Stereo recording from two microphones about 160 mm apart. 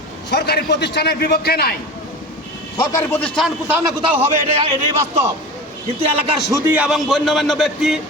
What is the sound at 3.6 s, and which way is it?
Speech, 10° right (ahead or behind).